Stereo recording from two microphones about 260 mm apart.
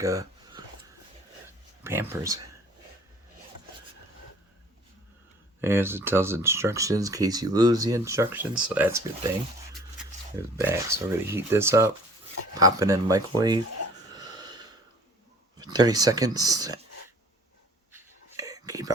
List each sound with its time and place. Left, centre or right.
0.0 s a sound: centre
1.8 s speech: centre
5.5 s speech: centre
10.0 s speech: centre
14.1 s wheeze: centre
15.5 s speech: centre
17.9 s whispering: centre